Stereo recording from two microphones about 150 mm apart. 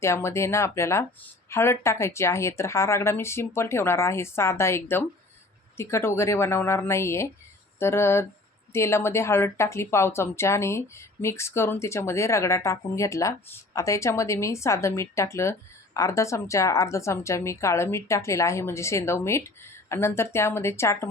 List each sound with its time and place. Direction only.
0.0 s a woman's voice: 20° left (ahead or behind)